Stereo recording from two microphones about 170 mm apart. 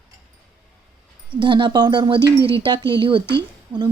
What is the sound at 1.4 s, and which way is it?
Speech, 30° right (ahead or behind).